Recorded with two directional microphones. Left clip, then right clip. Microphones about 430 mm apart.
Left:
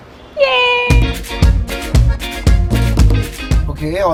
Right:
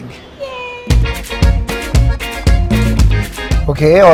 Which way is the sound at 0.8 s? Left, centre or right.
Centre.